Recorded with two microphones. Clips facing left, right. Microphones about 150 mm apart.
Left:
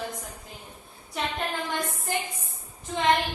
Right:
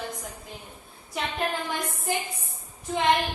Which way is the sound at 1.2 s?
Centre (ahead or behind).